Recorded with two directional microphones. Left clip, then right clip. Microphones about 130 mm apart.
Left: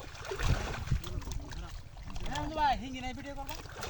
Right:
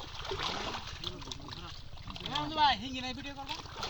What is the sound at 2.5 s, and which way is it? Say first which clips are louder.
Speech: right 2 dB; 45° left (ahead or behind).